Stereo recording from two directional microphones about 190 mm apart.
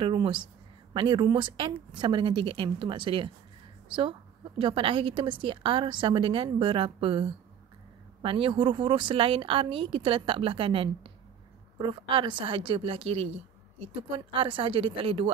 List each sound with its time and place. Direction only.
0.0 s a woman's voice: 25° right (ahead or behind)